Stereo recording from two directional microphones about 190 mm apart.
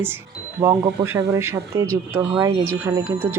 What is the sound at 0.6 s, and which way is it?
Speech, 15° right (ahead or behind).